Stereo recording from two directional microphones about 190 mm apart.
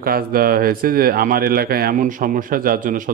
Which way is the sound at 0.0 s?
50° right (ahead or behind).